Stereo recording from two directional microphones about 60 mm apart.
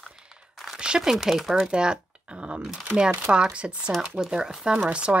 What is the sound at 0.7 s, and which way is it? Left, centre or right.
Speech, centre.